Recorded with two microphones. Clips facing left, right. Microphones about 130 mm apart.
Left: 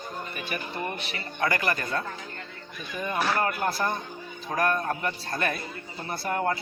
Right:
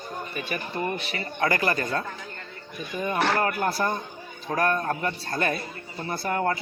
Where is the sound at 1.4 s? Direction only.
30° right (ahead or behind).